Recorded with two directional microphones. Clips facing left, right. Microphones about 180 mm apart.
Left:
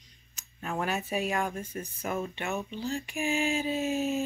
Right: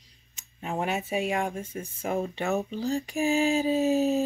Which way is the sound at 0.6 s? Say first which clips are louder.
Right 2 dB; 20° right (ahead or behind).